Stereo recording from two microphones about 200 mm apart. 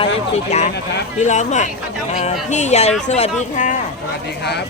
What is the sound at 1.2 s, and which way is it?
Speech, 35° left (ahead or behind).